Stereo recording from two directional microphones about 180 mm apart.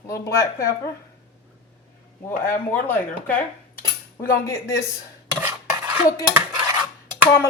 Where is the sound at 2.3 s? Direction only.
10° left (ahead or behind).